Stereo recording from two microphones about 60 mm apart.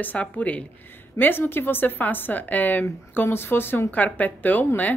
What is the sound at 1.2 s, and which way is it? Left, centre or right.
A woman's voice, left.